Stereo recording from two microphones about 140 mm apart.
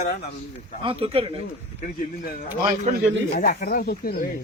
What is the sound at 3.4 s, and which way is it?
Speech, 90° left.